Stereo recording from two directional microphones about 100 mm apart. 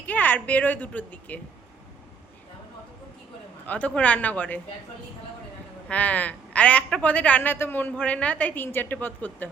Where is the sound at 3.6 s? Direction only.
15° left (ahead or behind).